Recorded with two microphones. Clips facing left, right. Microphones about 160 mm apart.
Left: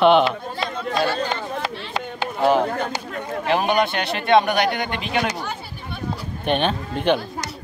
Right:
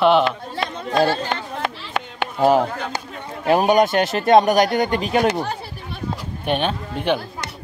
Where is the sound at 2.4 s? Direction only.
40° right (ahead or behind).